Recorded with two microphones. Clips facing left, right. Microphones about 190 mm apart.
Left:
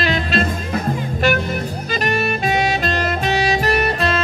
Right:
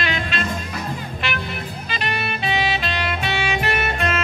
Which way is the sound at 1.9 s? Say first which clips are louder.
Left 7 dB; 45° left (ahead or behind).